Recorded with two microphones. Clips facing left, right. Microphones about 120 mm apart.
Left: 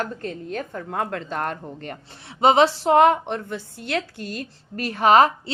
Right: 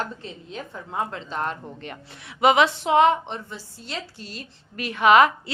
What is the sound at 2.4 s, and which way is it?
A woman's voice, 30° left (ahead or behind).